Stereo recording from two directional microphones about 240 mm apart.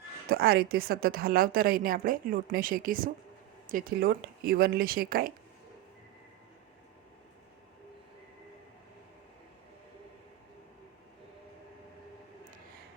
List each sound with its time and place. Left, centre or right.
0.3 s a woman's voice: right